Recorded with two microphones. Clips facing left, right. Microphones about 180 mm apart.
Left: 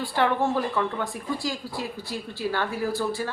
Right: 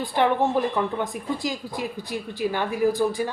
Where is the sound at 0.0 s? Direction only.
20° right (ahead or behind).